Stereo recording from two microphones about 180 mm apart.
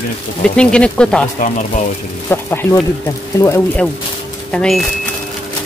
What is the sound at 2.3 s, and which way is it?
Speech, 10° left (ahead or behind).